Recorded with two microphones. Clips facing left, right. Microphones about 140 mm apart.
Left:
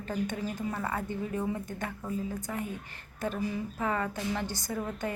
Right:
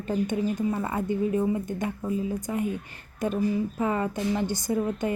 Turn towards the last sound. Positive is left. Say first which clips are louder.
# right 7 dB
turn(degrees=-15)  # may be behind; listen again after turning